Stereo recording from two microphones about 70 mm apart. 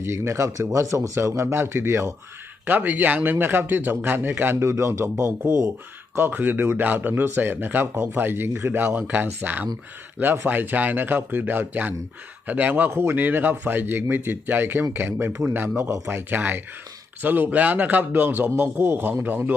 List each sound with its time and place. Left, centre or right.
0.0 s a man's voice: right
2.6 s speech: right
4.6 s speech: right
15.3 s a man's voice: right
15.5 s speech: right